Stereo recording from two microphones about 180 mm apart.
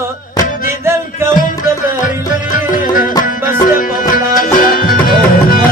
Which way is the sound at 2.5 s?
45° left (ahead or behind).